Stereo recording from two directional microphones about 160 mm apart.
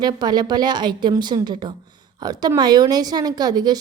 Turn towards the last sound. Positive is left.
turn(degrees=-25)  # may be behind; listen again after turning